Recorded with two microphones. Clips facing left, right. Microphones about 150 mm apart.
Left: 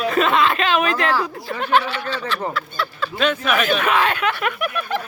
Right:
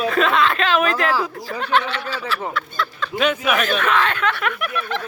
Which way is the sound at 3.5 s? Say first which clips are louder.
Left 1 dB; 5° left (ahead or behind).